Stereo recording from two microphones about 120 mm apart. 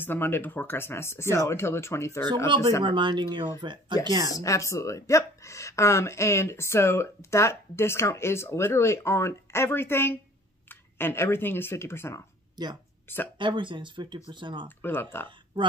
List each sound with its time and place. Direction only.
0.0 s speech: 15° left (ahead or behind)
2.8 s speech: 40° right (ahead or behind)
4.3 s speech: 30° left (ahead or behind)
13.4 s speech: 40° right (ahead or behind)
14.8 s speech: 15° left (ahead or behind)